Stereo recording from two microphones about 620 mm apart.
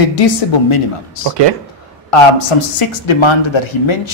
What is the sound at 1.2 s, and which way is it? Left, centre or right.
Speech, right.